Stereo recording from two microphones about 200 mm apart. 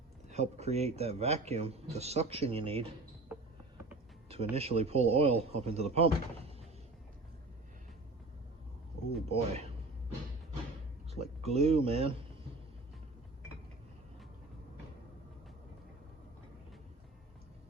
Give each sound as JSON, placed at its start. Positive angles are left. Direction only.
{"t": 0.3, "sound": "speech", "side_deg": -35}
{"t": 4.3, "sound": "speech", "side_deg": -30}
{"t": 9.3, "sound": "speech", "side_deg": -30}
{"t": 11.4, "sound": "speech", "side_deg": -30}